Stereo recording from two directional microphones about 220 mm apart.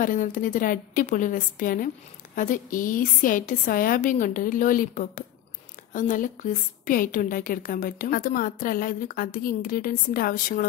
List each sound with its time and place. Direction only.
0.0 s a woman's voice: 35° left (ahead or behind)